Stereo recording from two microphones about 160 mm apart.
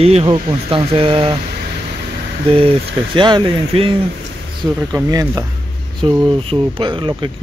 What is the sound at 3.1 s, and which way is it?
Speech, 30° right (ahead or behind).